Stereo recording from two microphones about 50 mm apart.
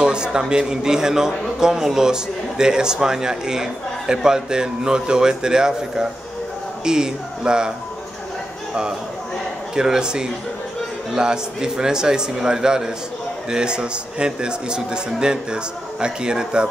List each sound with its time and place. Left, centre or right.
0.0 s a man's voice: centre
9.8 s a man's voice: centre